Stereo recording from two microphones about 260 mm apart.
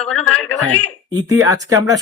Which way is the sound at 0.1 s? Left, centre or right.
Centre.